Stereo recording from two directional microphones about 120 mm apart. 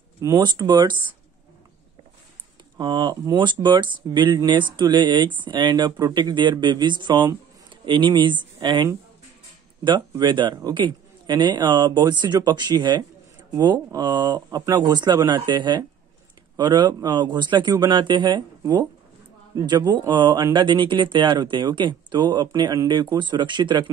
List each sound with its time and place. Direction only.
0.4 s speech: 35° right (ahead or behind)
2.8 s speech: 35° right (ahead or behind)
9.8 s speech: 35° right (ahead or behind)